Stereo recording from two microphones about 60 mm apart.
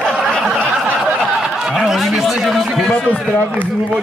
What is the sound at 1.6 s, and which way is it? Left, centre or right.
Speech, centre.